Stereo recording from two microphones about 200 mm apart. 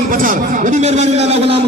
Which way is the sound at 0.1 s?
45° right (ahead or behind).